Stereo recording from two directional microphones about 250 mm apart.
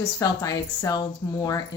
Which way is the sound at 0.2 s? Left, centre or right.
Centre.